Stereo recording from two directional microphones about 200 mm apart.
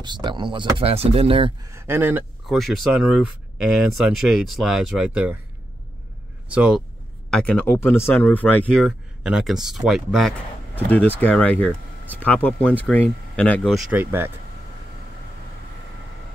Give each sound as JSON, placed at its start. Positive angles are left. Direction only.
{"t": 0.0, "sound": "speech", "side_deg": -20}
{"t": 1.7, "sound": "speech", "side_deg": -15}
{"t": 2.4, "sound": "speech", "side_deg": 0}
{"t": 6.5, "sound": "speech", "side_deg": -5}
{"t": 7.2, "sound": "speech", "side_deg": 5}
{"t": 13.9, "sound": "speech", "side_deg": -10}